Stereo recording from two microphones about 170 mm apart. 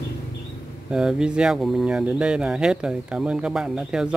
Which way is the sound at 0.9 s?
5° right (ahead or behind).